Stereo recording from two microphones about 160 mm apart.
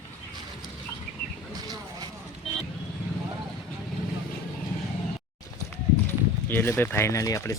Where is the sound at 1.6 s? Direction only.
25° right (ahead or behind).